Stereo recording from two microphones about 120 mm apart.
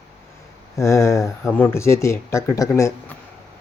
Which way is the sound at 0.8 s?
25° left (ahead or behind).